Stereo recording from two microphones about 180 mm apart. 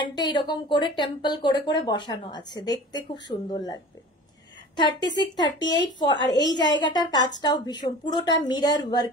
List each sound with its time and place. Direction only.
0.0 s a woman's voice: 25° left (ahead or behind)